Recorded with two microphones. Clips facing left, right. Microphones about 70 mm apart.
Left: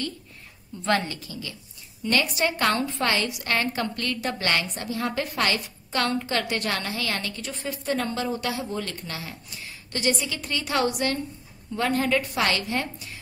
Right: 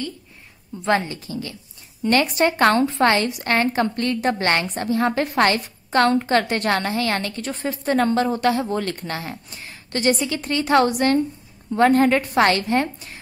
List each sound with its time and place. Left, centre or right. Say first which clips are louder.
0.8 s a woman's voice: right 4 dB; right